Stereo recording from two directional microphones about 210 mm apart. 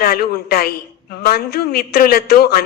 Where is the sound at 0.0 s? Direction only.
45° left (ahead or behind).